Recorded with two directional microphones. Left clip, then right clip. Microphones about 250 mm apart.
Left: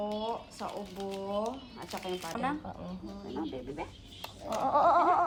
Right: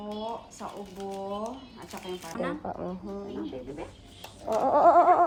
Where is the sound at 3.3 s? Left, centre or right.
Centre.